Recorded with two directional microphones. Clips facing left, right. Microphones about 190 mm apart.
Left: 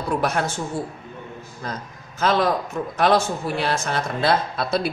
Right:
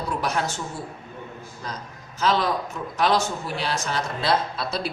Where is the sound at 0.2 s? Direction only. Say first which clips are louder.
Left 3 dB; 55° left (ahead or behind).